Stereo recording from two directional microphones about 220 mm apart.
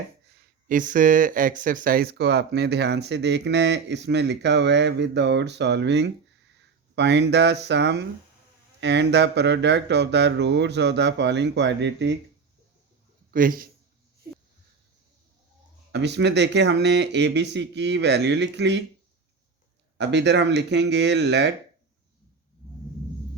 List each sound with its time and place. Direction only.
0.3 s speech: 40° right (ahead or behind)
13.3 s a man's voice: 40° right (ahead or behind)
15.9 s speech: 50° right (ahead or behind)
20.0 s speech: 50° right (ahead or behind)